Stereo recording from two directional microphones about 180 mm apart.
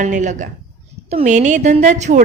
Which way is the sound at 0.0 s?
45° right (ahead or behind).